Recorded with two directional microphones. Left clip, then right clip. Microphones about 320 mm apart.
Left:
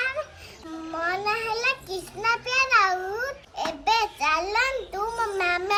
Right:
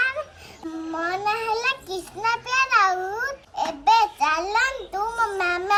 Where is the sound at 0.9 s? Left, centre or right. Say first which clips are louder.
Right 1 dB; centre.